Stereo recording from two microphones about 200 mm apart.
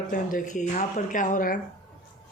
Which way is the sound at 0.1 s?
40° left (ahead or behind).